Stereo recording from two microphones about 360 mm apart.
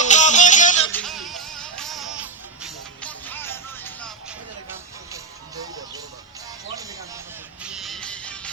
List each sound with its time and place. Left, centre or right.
0.0 s music: centre
1.0 s music: centre
5.1 s music: centre
7.6 s music: centre